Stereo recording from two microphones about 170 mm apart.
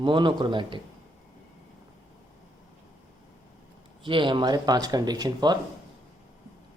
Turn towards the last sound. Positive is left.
turn(degrees=-25)  # may be behind; listen again after turning